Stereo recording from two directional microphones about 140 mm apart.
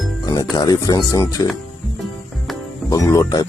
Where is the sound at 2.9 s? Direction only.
20° left (ahead or behind).